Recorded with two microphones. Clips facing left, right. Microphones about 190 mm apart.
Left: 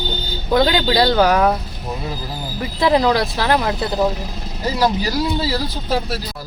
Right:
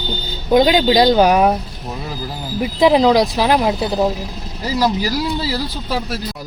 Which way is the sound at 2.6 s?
15° right (ahead or behind).